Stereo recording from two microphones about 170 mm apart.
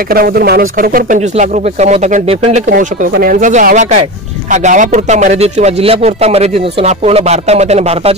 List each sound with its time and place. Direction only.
0.1 s speech: 60° right (ahead or behind)
1.3 s speech: 45° right (ahead or behind)
2.7 s speech: 55° right (ahead or behind); by 8.2 s 35° right (ahead or behind)